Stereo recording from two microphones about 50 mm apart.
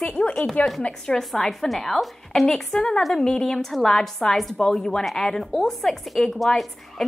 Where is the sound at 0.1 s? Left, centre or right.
Centre.